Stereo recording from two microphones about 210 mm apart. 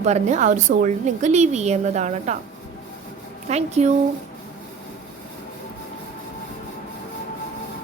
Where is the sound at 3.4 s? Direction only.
30° right (ahead or behind).